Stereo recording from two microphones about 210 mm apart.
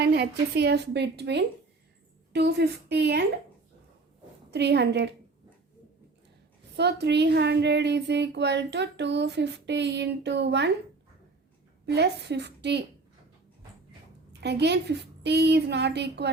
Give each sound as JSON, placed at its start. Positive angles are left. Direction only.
{"t": 0.0, "sound": "a woman's voice", "side_deg": -50}
{"t": 4.5, "sound": "a woman's voice", "side_deg": -55}
{"t": 6.7, "sound": "speech", "side_deg": -55}
{"t": 11.9, "sound": "a woman's voice", "side_deg": -55}
{"t": 14.4, "sound": "a woman's voice", "side_deg": -55}